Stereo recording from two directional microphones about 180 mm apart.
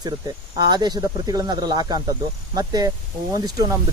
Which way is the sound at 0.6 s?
25° right (ahead or behind).